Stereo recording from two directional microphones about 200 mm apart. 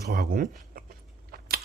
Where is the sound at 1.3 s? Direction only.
50° right (ahead or behind).